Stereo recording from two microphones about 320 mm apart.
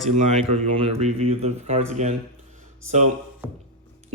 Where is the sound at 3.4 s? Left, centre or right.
Centre.